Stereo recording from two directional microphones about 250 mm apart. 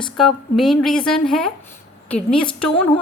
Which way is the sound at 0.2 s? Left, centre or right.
Centre.